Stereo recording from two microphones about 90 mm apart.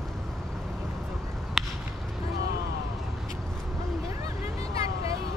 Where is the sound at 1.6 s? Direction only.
5° right (ahead or behind).